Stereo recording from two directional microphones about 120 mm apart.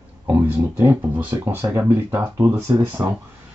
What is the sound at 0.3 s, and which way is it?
Speech, 15° right (ahead or behind).